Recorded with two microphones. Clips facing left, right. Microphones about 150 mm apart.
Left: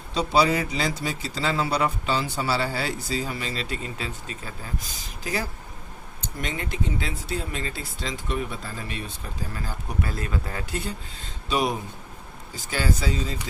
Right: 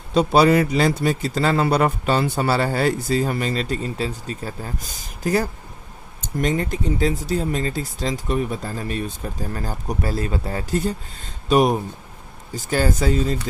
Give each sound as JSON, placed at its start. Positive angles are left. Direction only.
{"t": 0.1, "sound": "speech", "side_deg": -55}